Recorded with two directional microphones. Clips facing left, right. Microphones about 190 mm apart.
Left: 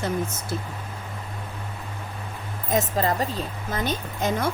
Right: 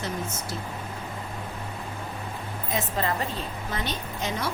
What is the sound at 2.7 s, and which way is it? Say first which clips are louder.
A woman's voice: left 5 dB; 40° left (ahead or behind).